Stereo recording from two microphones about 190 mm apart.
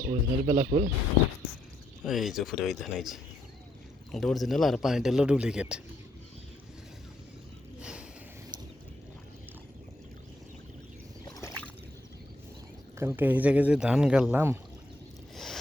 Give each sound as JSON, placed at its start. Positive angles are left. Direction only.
{"t": 0.0, "sound": "speech", "side_deg": -45}
{"t": 2.0, "sound": "a man's voice", "side_deg": 0}
{"t": 7.8, "sound": "a sound", "side_deg": -5}
{"t": 13.0, "sound": "speech", "side_deg": -10}